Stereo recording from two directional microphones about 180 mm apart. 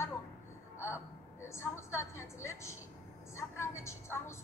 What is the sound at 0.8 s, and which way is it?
A woman's voice, 15° left (ahead or behind).